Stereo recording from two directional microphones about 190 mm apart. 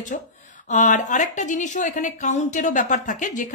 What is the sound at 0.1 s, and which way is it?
A woman's voice, 45° left (ahead or behind).